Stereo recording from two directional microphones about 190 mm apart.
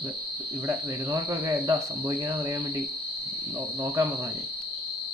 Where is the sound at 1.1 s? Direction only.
20° right (ahead or behind).